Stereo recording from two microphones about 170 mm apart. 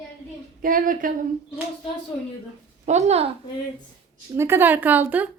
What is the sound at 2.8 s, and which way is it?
Speech, 40° right (ahead or behind).